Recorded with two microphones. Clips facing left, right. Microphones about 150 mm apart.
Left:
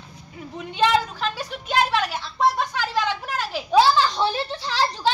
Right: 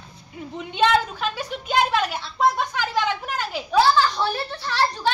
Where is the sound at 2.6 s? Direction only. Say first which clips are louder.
Even; centre (ahead or behind).